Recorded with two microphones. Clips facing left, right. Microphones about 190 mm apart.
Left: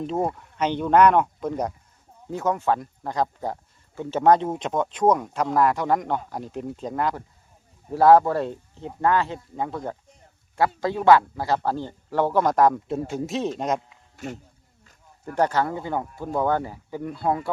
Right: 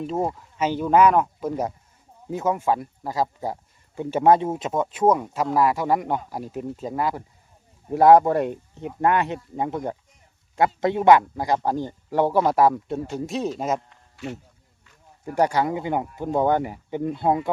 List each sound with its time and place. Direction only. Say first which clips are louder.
0.0 s speech: even; centre (ahead or behind)
15.2 s speech: right 1 dB; 10° right (ahead or behind)